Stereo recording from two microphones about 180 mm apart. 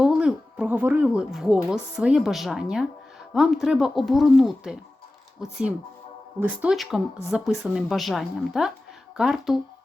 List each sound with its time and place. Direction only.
0.0 s a woman's voice: centre (ahead or behind)